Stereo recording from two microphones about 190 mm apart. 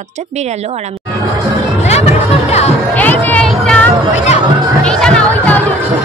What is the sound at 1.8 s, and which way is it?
Music, 35° left (ahead or behind).